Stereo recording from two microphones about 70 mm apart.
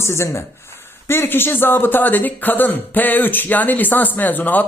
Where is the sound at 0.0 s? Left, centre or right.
Left.